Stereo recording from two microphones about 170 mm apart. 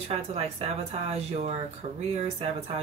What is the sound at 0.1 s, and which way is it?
Speech, 35° right (ahead or behind).